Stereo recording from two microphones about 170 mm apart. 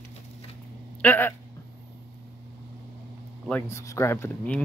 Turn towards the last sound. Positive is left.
turn(degrees=15)  # may be behind; listen again after turning